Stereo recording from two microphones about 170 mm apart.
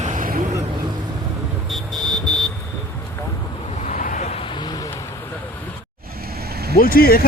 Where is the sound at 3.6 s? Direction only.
45° left (ahead or behind); by 4.8 s 25° left (ahead or behind).